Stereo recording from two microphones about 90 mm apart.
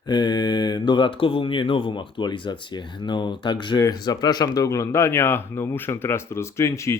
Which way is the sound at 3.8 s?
45° left (ahead or behind).